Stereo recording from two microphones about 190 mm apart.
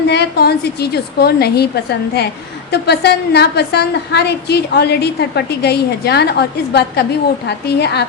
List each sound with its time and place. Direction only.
0.1 s a woman's voice: 60° left (ahead or behind)